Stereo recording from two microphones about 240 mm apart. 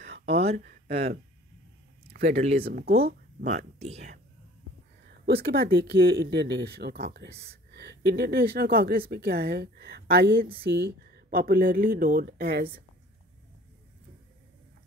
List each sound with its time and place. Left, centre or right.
0.2 s speech: right
2.1 s speech: right
3.8 s speech: right
5.2 s speech: right